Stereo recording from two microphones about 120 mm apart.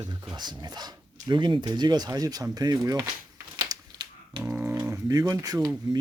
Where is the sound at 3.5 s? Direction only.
40° right (ahead or behind).